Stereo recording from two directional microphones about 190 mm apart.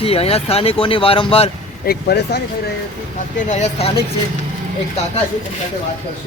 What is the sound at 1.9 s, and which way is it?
Speech, 55° left (ahead or behind).